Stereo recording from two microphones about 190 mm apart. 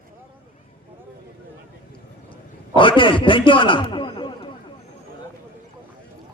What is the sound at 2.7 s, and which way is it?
A man's voice, 25° left (ahead or behind).